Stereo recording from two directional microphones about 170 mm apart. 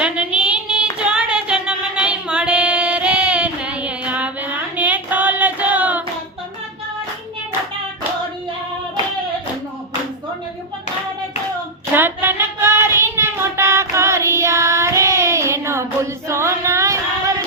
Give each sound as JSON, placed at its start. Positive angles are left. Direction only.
{"t": 0.0, "sound": "child singing", "side_deg": -5}
{"t": 11.9, "sound": "child singing", "side_deg": -10}
{"t": 16.3, "sound": "female singing", "side_deg": -15}